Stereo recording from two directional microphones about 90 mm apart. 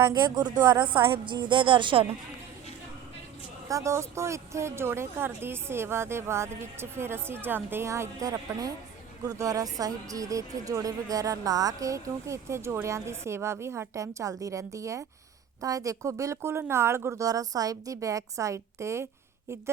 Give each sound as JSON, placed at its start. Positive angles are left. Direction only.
{"t": 0.0, "sound": "a woman's voice", "side_deg": -50}
{"t": 3.7, "sound": "speech", "side_deg": -35}
{"t": 8.2, "sound": "a woman's voice", "side_deg": -45}